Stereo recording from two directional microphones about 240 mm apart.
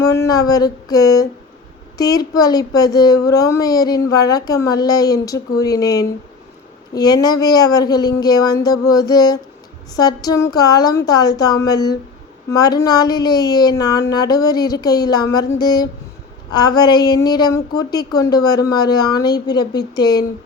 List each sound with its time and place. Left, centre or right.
0.0 s speech: centre